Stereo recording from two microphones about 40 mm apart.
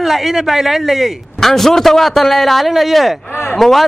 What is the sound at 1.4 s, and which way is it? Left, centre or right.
A man's voice, centre.